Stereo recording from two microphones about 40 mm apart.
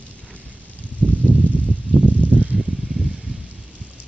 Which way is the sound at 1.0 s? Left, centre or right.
Left.